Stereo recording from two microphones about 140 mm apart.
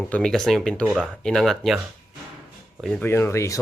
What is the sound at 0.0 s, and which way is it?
Speech, 5° left (ahead or behind).